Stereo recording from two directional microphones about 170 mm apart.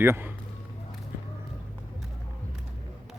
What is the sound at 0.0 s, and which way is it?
Speech, 15° right (ahead or behind).